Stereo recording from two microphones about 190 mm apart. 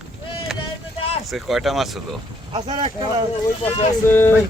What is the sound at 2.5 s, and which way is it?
Speech, 25° right (ahead or behind).